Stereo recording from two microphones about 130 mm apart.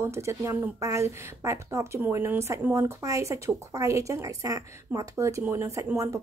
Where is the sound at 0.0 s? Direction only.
20° right (ahead or behind).